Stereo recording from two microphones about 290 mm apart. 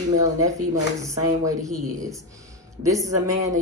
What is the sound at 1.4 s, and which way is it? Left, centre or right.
A woman's voice, centre.